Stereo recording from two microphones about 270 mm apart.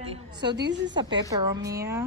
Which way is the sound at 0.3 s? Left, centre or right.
Right.